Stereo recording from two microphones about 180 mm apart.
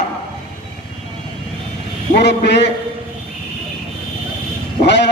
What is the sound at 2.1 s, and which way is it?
Speech, 70° left (ahead or behind).